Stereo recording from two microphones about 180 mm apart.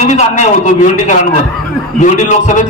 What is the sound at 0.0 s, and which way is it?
A man's voice, 40° left (ahead or behind).